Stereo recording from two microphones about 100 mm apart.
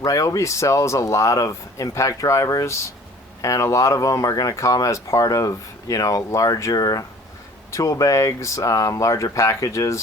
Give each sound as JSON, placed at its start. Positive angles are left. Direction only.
{"t": 0.0, "sound": "speech", "side_deg": 35}